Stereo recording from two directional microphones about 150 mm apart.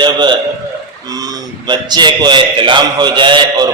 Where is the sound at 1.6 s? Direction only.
30° right (ahead or behind).